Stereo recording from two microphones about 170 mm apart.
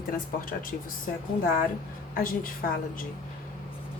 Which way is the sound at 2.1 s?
55° left (ahead or behind).